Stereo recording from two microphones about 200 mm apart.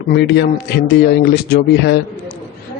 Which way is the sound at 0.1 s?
55° left (ahead or behind).